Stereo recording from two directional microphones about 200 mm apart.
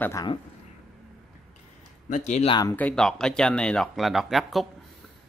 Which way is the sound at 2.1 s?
35° left (ahead or behind).